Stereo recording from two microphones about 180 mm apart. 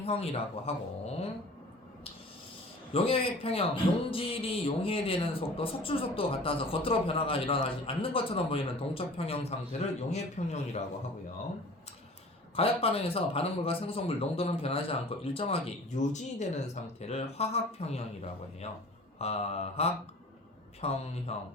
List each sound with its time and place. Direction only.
0.0 s a man's voice: 35° left (ahead or behind)
2.9 s a man's voice: 30° left (ahead or behind)
12.5 s a man's voice: 30° left (ahead or behind)
19.2 s a man's voice: 35° left (ahead or behind)